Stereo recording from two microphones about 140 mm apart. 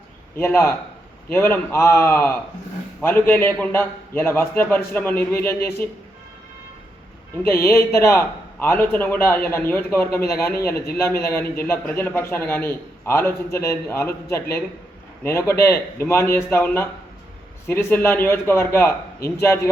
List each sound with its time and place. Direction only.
0.3 s a man's voice: 20° left (ahead or behind)
7.5 s a man's voice: 20° left (ahead or behind)